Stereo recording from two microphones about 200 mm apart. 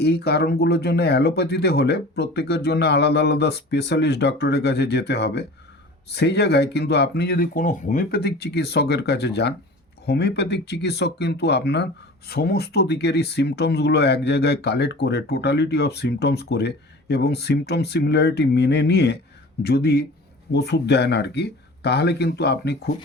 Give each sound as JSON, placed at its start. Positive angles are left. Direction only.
{"t": 0.0, "sound": "speech", "side_deg": 55}